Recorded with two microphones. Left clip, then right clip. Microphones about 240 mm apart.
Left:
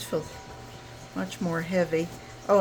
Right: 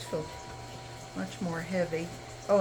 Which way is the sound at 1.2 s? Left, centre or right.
Left.